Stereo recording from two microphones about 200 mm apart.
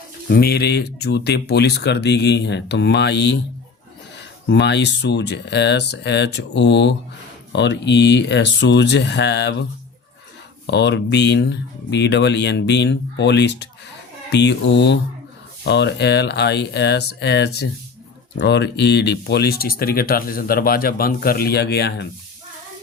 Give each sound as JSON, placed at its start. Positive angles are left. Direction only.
{"t": 0.3, "sound": "speech", "side_deg": 50}
{"t": 4.4, "sound": "speech", "side_deg": 60}
{"t": 10.7, "sound": "speech", "side_deg": 60}